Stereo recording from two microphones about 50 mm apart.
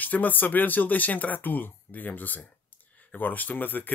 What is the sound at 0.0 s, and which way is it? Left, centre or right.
Speech, left.